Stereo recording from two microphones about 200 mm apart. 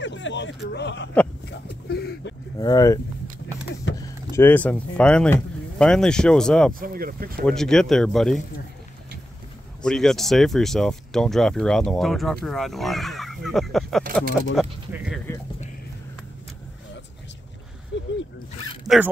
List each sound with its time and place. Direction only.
0.0 s speech: 65° left (ahead or behind)
1.5 s a sound: 55° left (ahead or behind)
2.6 s speech: 15° left (ahead or behind)
3.9 s vehicle: 65° left (ahead or behind)
4.3 s speech: 10° left (ahead or behind)
6.7 s speech: 45° right (ahead or behind)
7.4 s speech: centre (ahead or behind)
9.8 s speech: centre (ahead or behind)
17.9 s a sound: 65° left (ahead or behind)
18.9 s speech: centre (ahead or behind)